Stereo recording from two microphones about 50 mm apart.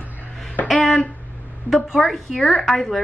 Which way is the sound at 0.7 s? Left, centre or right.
Centre.